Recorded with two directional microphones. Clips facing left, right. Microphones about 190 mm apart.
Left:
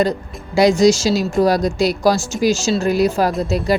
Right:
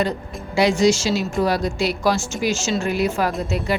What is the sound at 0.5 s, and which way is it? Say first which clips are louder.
Speech: left 4 dB; 40° left (ahead or behind).